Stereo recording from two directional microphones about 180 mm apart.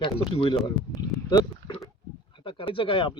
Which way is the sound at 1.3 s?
20° left (ahead or behind).